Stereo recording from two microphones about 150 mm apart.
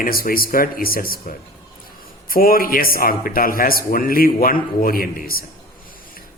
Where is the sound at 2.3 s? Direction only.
75° left (ahead or behind).